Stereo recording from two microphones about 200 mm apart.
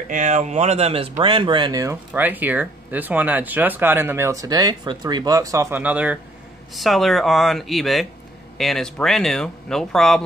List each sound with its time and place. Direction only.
0.1 s speech: 35° right (ahead or behind); by 10.2 s centre (ahead or behind)